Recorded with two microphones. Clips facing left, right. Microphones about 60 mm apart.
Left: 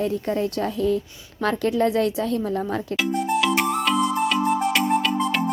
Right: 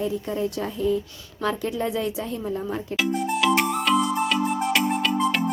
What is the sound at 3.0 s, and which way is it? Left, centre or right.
Music, centre.